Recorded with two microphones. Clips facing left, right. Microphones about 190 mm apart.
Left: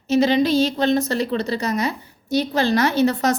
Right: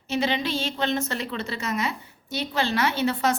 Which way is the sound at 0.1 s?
40° left (ahead or behind).